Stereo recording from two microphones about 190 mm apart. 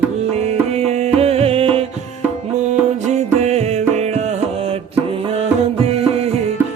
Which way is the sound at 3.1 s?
35° right (ahead or behind).